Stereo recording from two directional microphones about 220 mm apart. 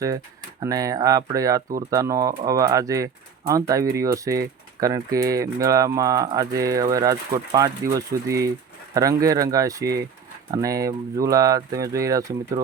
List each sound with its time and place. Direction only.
0.6 s speech: 15° right (ahead or behind)